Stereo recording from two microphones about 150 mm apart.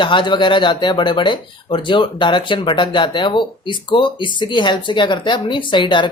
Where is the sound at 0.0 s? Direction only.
30° left (ahead or behind).